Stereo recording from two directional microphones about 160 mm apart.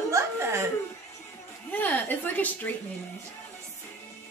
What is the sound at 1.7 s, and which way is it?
A woman's voice, 10° left (ahead or behind).